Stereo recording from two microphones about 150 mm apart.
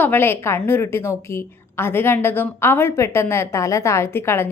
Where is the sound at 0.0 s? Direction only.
15° left (ahead or behind).